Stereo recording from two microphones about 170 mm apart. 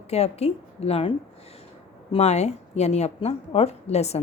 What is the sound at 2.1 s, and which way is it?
A woman's voice, 40° left (ahead or behind).